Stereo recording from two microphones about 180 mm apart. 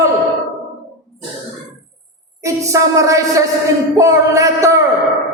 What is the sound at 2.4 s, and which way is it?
Speech, 15° right (ahead or behind).